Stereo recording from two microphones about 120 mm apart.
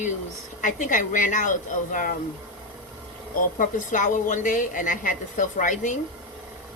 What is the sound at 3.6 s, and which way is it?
A woman's voice, 90° left.